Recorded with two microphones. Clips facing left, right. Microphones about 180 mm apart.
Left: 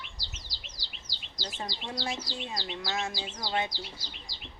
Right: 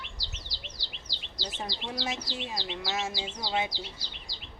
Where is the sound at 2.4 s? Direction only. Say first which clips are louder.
Right 1 dB; 5° right (ahead or behind).